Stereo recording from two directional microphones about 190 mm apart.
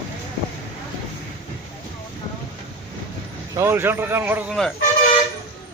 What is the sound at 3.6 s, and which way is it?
Speech, 15° right (ahead or behind).